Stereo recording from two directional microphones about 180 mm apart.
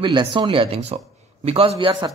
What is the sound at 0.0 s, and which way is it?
Speech, 25° right (ahead or behind).